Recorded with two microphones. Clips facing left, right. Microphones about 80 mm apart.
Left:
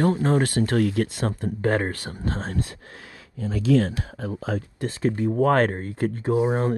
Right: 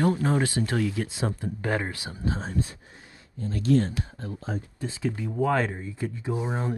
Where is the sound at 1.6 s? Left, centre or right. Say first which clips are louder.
Left 6 dB; left.